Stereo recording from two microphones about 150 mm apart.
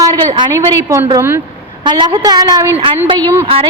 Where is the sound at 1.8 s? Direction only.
30° right (ahead or behind).